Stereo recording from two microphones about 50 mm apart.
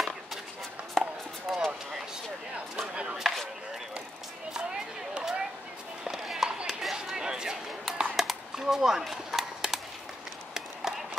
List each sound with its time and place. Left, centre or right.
1.0 s chopping: centre
1.5 s vehicle: centre
2.9 s chopping: right
3.2 s chopping: centre
4.6 s a sound: centre
6.1 s a sound: centre
10.5 s run: centre